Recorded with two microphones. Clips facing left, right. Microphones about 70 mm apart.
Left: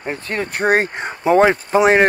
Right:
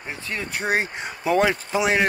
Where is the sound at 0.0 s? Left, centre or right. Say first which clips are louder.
Left 7 dB; left.